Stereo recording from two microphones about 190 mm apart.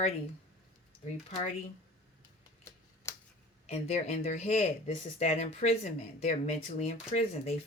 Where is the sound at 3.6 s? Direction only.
35° left (ahead or behind).